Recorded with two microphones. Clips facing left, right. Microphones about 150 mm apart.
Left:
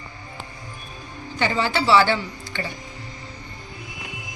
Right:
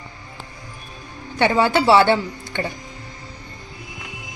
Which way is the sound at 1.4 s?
60° right (ahead or behind).